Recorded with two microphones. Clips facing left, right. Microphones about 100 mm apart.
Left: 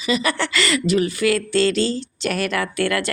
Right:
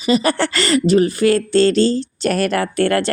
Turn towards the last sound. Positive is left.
turn(degrees=-35)  # may be behind; listen again after turning